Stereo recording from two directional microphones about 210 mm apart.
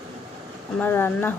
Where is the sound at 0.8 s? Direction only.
10° left (ahead or behind).